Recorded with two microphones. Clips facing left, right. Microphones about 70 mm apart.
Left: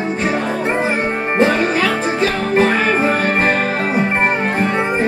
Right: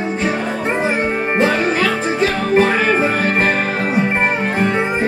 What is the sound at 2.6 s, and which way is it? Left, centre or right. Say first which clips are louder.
Music: even; centre.